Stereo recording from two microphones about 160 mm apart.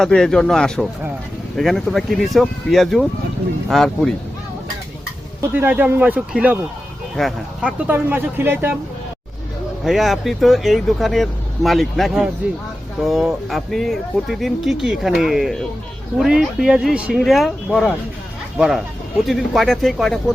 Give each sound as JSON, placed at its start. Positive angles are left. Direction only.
{"t": 0.0, "sound": "speech", "side_deg": 5}
{"t": 5.5, "sound": "speech", "side_deg": -10}
{"t": 7.9, "sound": "speech", "side_deg": -10}
{"t": 9.8, "sound": "speech", "side_deg": 0}